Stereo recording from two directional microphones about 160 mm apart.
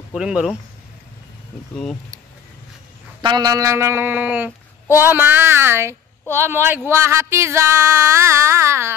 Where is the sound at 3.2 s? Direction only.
25° right (ahead or behind); by 4.5 s 10° right (ahead or behind).